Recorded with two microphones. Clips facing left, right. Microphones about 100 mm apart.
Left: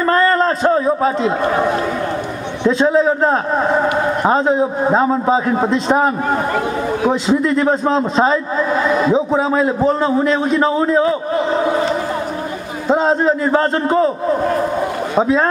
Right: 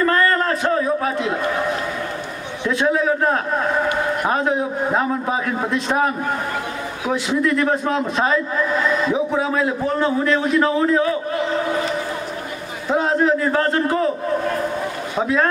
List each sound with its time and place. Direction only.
0.0 s a man's voice: 25° left (ahead or behind)
12.8 s a man's voice: 25° left (ahead or behind)